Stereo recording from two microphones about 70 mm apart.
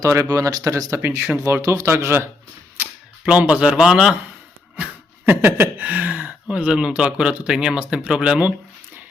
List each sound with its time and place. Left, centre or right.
0.0 s speech: right
3.2 s speech: centre
5.2 s speech: right
5.8 s speech: right